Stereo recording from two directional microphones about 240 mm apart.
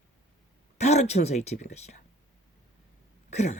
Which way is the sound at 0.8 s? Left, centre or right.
Left.